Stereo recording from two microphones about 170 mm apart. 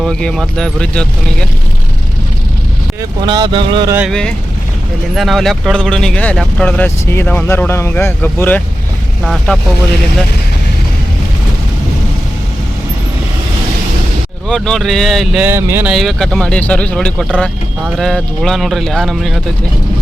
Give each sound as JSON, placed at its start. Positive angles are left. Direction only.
{"t": 0.0, "sound": "speech", "side_deg": 5}
{"t": 3.2, "sound": "speech", "side_deg": -25}
{"t": 4.1, "sound": "speech", "side_deg": 5}
{"t": 14.4, "sound": "speech", "side_deg": 5}
{"t": 15.9, "sound": "speech", "side_deg": 0}